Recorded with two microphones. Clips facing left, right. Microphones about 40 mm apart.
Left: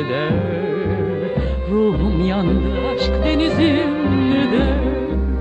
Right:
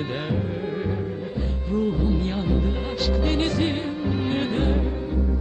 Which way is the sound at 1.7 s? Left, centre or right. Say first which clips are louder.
Left 6 dB; left.